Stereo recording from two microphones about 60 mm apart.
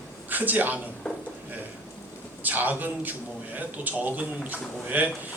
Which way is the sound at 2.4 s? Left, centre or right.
Right.